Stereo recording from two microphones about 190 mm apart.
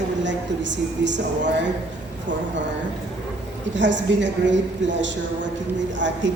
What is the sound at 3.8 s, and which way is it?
Speech, 70° right (ahead or behind).